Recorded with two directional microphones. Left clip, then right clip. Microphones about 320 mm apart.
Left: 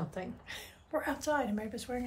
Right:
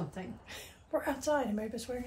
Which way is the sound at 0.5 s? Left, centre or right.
Centre.